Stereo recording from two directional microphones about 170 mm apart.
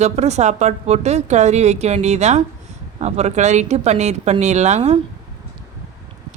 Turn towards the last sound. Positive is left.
turn(degrees=-40)  # may be behind; listen again after turning